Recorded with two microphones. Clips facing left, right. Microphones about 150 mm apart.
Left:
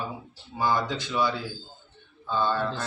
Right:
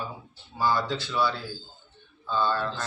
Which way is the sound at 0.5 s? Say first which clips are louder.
Even; 15° left (ahead or behind).